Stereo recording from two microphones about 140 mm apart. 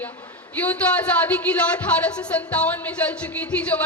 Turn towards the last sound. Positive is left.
turn(degrees=10)  # may be behind; listen again after turning